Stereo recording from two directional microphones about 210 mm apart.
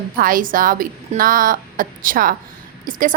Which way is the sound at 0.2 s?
40° right (ahead or behind).